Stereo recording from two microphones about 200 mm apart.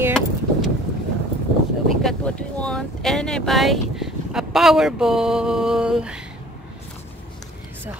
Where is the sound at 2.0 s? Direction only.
5° left (ahead or behind).